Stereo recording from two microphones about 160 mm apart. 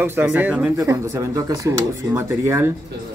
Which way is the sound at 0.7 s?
20° right (ahead or behind).